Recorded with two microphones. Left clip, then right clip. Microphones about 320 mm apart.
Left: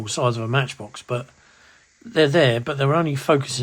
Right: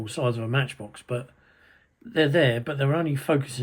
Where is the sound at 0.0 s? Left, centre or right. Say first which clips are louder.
Left 5 dB; centre.